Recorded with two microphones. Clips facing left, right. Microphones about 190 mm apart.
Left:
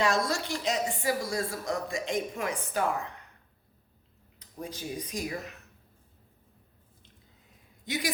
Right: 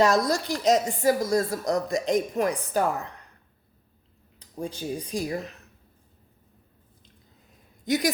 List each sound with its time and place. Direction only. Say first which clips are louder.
0.0 s a woman's voice: right 6 dB; 40° right (ahead or behind)
4.4 s speech: right 6 dB; 30° right (ahead or behind)
7.9 s a woman's voice: right 8 dB; 40° right (ahead or behind)